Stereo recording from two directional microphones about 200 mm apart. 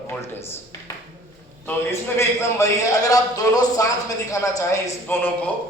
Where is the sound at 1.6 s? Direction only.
15° left (ahead or behind).